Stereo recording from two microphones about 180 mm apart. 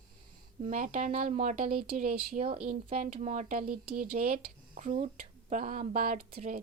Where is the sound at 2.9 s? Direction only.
35° right (ahead or behind); by 6.2 s 50° right (ahead or behind).